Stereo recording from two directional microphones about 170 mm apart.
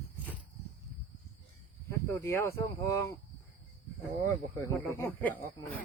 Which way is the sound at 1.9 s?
15° left (ahead or behind).